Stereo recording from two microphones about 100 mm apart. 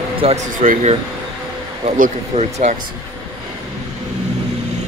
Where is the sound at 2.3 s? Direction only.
90° right.